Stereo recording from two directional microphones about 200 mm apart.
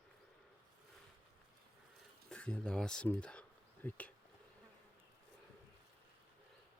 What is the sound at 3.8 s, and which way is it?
Speech, 5° left (ahead or behind).